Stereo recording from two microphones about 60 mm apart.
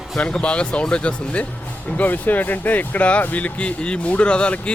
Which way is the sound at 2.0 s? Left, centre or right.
Left.